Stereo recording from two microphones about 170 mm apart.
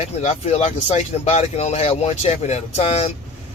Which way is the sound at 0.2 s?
40° left (ahead or behind).